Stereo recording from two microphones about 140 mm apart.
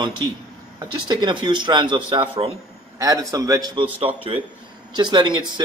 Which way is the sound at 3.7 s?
40° right (ahead or behind).